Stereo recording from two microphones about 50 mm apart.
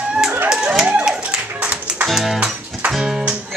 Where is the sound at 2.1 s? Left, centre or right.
Centre.